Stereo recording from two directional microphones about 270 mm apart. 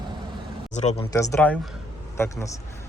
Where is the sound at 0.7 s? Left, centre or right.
Left.